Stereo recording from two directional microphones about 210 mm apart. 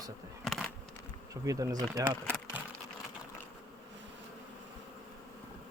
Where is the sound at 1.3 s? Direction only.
15° right (ahead or behind).